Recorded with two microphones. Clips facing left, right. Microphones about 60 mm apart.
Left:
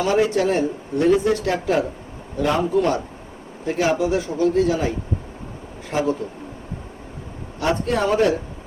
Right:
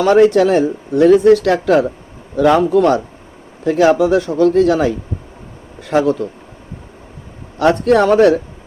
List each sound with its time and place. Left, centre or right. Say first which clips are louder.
0.0 s a man's voice: right 9 dB; right
7.6 s speech: right 9 dB; right